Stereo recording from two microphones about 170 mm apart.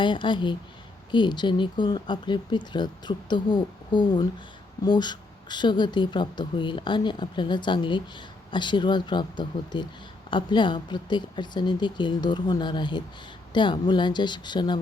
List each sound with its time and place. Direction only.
0.0 s speech: 30° left (ahead or behind)